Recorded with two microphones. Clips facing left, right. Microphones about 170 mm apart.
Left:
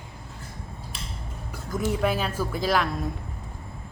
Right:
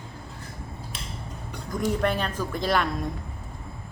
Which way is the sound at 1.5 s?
5° left (ahead or behind).